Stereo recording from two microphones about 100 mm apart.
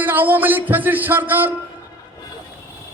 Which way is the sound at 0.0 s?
20° right (ahead or behind).